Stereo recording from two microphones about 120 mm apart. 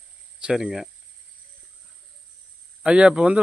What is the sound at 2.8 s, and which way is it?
Speech, 10° right (ahead or behind).